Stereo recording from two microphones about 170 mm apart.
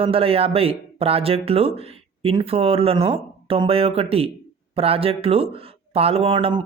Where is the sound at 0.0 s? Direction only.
35° right (ahead or behind).